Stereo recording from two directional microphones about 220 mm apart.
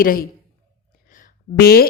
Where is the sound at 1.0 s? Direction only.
40° left (ahead or behind).